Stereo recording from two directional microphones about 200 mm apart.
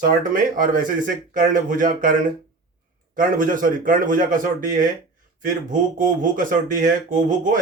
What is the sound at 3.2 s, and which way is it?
A man's voice, 40° right (ahead or behind).